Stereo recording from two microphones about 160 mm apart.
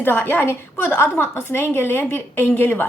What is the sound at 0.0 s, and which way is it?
A woman's voice, 15° left (ahead or behind).